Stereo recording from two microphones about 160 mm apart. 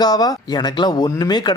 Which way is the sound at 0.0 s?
25° left (ahead or behind).